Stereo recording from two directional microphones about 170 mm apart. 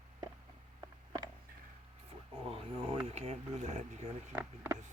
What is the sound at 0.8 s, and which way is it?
Mechanisms, 20° right (ahead or behind).